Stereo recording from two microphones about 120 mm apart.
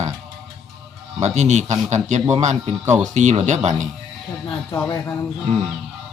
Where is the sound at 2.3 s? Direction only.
70° right (ahead or behind).